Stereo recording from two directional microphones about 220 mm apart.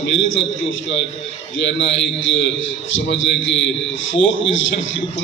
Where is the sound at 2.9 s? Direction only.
55° left (ahead or behind).